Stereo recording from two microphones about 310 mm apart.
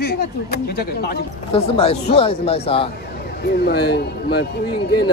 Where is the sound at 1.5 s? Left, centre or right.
Centre.